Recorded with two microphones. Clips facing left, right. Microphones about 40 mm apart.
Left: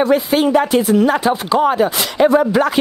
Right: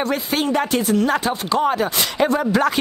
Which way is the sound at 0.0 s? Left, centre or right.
Centre.